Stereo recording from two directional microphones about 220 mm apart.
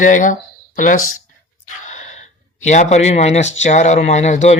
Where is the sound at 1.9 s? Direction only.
30° left (ahead or behind).